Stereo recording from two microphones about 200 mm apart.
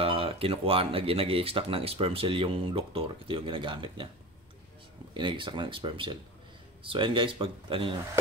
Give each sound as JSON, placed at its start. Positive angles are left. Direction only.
{"t": 0.0, "sound": "speech", "side_deg": -30}
{"t": 5.1, "sound": "speech", "side_deg": -25}